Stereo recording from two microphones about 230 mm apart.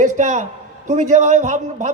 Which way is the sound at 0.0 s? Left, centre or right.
Right.